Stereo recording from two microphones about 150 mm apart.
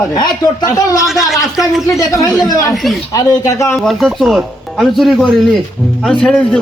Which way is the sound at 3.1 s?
20° left (ahead or behind).